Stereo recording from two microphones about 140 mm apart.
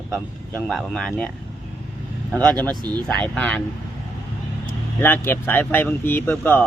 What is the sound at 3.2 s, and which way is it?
Speech, 10° left (ahead or behind).